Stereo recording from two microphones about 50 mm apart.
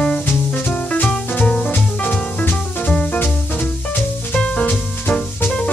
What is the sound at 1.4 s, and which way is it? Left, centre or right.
Music, centre.